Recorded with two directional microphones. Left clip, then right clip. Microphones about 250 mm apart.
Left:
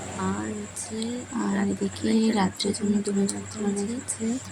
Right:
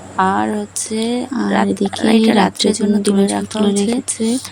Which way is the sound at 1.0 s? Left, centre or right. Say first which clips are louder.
Right 12 dB; right.